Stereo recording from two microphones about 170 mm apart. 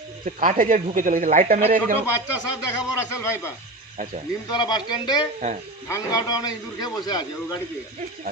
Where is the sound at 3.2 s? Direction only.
15° left (ahead or behind).